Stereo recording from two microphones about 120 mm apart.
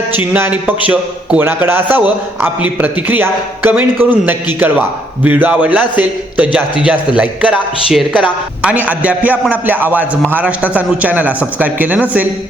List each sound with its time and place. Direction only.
0.1 s a man's voice: 15° right (ahead or behind)